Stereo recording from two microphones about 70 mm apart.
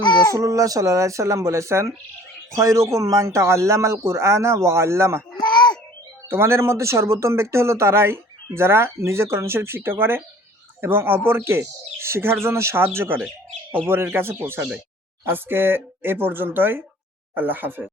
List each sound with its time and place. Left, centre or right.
0.0 s speech: left
0.3 s speech: right
5.4 s a sound: left
6.2 s speech: right